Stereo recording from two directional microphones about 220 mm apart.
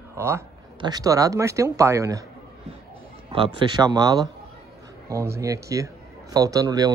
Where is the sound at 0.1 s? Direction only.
10° right (ahead or behind).